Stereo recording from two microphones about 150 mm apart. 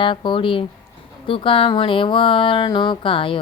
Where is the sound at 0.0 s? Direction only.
35° left (ahead or behind).